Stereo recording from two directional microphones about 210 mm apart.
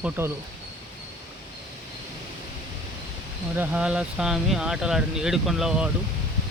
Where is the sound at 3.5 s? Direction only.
10° right (ahead or behind).